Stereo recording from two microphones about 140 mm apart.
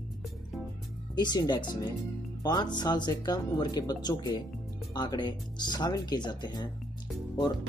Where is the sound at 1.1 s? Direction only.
30° left (ahead or behind).